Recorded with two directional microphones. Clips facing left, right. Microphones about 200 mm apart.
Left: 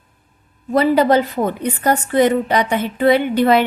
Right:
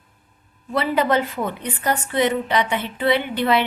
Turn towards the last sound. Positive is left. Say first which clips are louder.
# left 6 dB
turn(degrees=45)  # may be behind; listen again after turning